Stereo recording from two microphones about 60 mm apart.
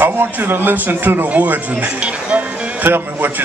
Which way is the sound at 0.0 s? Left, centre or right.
Right.